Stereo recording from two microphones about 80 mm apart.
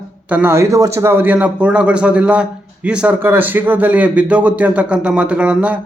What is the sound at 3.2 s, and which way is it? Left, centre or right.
Speech, right.